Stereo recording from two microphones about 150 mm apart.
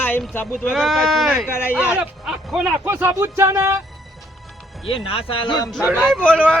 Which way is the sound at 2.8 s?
15° right (ahead or behind).